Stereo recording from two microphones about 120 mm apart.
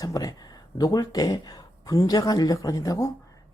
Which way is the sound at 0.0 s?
30° left (ahead or behind).